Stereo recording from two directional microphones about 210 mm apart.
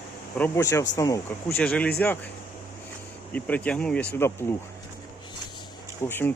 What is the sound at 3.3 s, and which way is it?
Speech, 5° left (ahead or behind).